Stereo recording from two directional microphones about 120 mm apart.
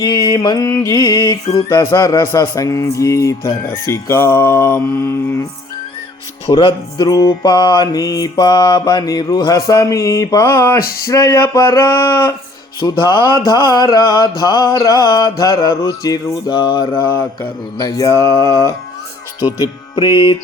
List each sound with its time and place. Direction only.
0.0 s music: 35° left (ahead or behind)
2.2 s mantra: 25° left (ahead or behind)
6.6 s mantra: 40° left (ahead or behind); by 12.3 s 25° left (ahead or behind)
12.8 s music: 40° left (ahead or behind)
17.7 s mantra: 30° left (ahead or behind)
20.1 s music: 35° left (ahead or behind)